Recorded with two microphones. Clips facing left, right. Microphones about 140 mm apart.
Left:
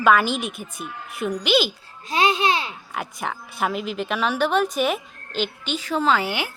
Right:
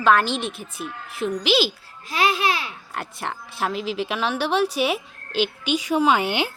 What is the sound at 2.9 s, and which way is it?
A woman's voice, centre (ahead or behind).